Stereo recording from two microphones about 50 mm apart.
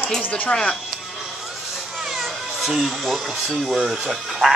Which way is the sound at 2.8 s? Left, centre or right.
Centre.